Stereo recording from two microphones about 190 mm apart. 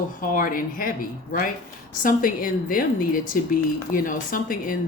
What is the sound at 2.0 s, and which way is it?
Speech, 45° left (ahead or behind).